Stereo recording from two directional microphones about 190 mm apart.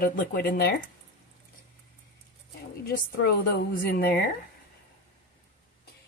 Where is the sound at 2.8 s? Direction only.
50° left (ahead or behind).